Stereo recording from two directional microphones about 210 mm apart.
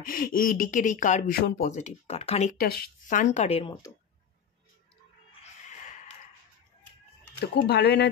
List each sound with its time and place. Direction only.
0.0 s speech: 40° left (ahead or behind)
2.5 s speech: 45° left (ahead or behind); by 3.9 s 20° left (ahead or behind)
7.6 s speech: 50° left (ahead or behind)